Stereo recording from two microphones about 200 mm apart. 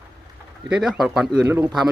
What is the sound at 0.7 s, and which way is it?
Speech, 5° right (ahead or behind).